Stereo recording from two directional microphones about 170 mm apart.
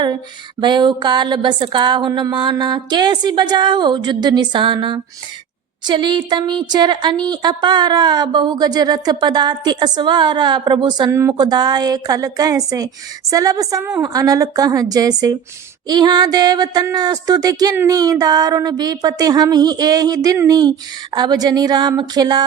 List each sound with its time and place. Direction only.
0.6 s speech: 25° right (ahead or behind)